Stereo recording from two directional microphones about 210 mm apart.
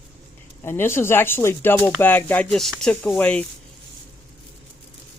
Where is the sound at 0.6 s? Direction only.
10° left (ahead or behind).